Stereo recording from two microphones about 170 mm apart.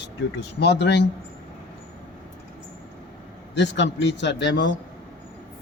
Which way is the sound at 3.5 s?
90° left.